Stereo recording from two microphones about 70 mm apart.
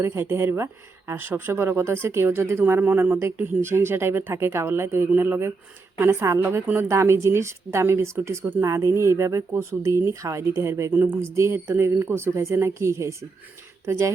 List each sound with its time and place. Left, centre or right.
0.0 s speech: right
10.9 s speech: right